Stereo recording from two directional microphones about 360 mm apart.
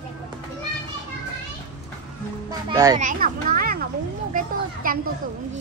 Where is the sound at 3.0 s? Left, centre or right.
Right.